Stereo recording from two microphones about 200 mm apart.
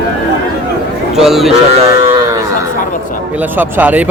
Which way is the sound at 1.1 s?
Centre (ahead or behind).